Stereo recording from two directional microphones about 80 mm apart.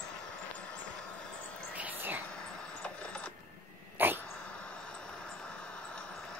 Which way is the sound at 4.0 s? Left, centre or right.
Right.